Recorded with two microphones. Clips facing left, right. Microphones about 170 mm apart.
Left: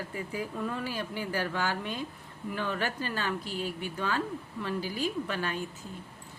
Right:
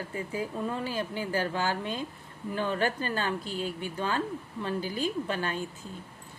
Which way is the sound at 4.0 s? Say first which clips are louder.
Right 1 dB; 30° right (ahead or behind).